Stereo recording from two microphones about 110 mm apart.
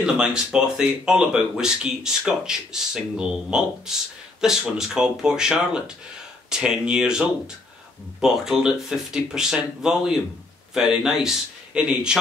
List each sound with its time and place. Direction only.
0.0 s a man's voice: 10° right (ahead or behind)